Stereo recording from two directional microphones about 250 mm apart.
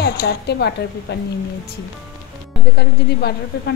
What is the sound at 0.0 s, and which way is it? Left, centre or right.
Speech, left.